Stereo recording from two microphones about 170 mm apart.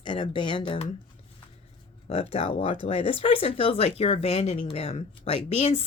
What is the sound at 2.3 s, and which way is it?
Speech, 35° left (ahead or behind).